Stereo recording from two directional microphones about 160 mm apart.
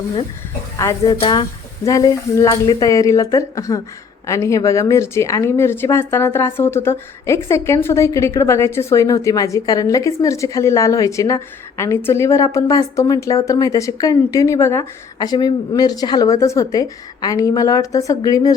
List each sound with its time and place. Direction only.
1.0 s speech: 30° left (ahead or behind)